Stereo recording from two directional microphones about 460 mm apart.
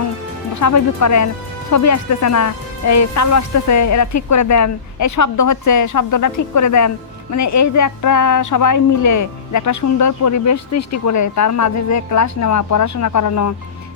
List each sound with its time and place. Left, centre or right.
0.6 s speech: left